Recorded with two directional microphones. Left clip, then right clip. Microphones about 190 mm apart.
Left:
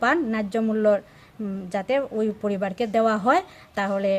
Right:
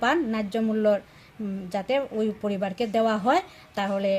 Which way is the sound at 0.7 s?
10° left (ahead or behind).